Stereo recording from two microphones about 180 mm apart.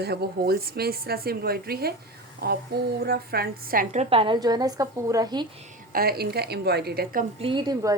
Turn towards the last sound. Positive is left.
turn(degrees=-25)  # may be behind; listen again after turning